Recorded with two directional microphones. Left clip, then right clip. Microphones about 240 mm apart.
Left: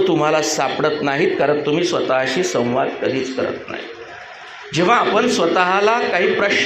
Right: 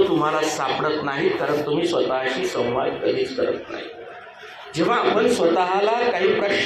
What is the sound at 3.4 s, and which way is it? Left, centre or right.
Speech, left.